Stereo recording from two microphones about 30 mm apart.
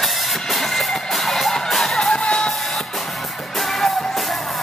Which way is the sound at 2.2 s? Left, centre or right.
Left.